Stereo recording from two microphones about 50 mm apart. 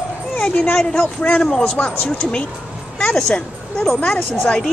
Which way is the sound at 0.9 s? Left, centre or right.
Left.